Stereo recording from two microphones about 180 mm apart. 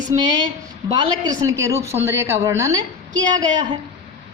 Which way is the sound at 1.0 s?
20° right (ahead or behind).